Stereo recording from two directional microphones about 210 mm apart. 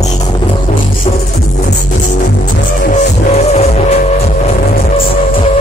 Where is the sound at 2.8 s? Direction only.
35° left (ahead or behind).